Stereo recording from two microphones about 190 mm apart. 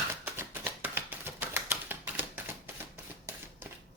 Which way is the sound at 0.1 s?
10° right (ahead or behind).